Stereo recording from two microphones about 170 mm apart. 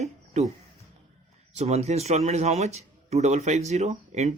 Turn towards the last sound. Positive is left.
turn(degrees=-40)  # may be behind; listen again after turning